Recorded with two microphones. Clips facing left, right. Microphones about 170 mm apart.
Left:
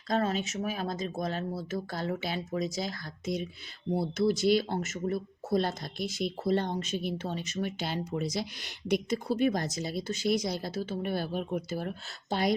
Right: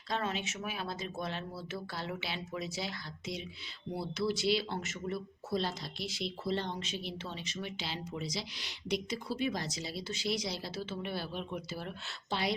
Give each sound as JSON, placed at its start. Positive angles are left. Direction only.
{"t": 0.1, "sound": "speech", "side_deg": 40}